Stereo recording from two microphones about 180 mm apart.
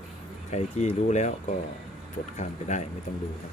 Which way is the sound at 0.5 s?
40° left (ahead or behind).